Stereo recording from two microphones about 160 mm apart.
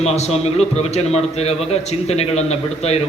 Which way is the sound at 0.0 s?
40° left (ahead or behind).